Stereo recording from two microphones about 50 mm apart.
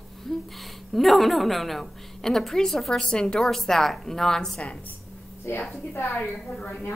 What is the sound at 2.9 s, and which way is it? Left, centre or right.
A woman's voice, centre.